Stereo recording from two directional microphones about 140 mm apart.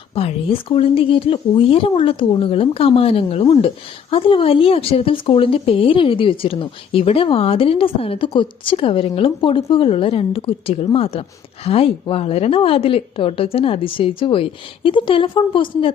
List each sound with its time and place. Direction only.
0.1 s a woman's voice: 45° left (ahead or behind)